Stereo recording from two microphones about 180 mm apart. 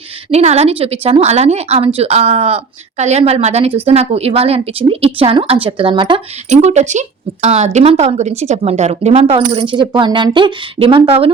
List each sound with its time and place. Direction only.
0.3 s a woman's voice: 35° right (ahead or behind)
6.5 s a woman's voice: 40° right (ahead or behind)
9.4 s speech: 25° right (ahead or behind)